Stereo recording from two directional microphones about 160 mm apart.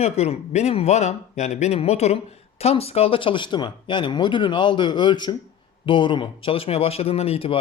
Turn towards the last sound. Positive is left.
turn(degrees=35)  # may be behind; listen again after turning